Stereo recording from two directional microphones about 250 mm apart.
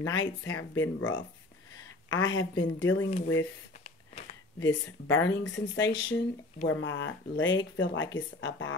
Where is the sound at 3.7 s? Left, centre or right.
Left.